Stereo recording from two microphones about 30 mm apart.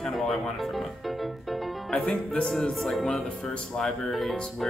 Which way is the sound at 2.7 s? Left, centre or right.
Centre.